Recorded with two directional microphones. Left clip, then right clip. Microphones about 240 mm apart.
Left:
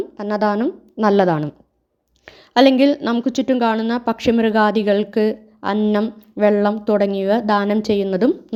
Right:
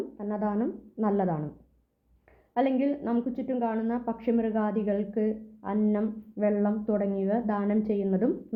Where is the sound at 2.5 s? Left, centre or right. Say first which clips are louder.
Left 14 dB; left.